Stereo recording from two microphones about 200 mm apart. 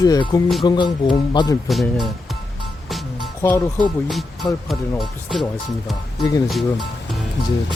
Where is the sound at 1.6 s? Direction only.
Centre (ahead or behind).